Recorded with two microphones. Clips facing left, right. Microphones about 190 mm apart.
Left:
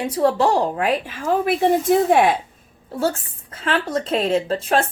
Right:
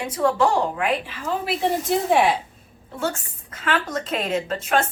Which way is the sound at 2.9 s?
35° left (ahead or behind).